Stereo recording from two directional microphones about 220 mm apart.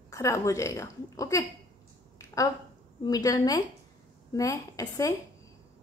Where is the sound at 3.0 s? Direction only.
15° left (ahead or behind).